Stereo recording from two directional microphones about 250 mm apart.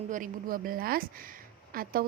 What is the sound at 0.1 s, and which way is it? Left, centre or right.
Speech, right.